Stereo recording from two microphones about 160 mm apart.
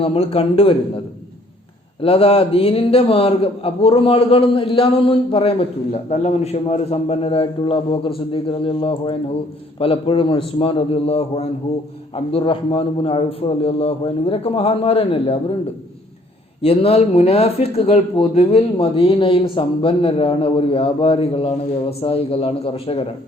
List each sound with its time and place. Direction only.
0.0 s a man's voice: 35° left (ahead or behind)
2.0 s a man's voice: 35° left (ahead or behind)
16.6 s a man's voice: 40° left (ahead or behind)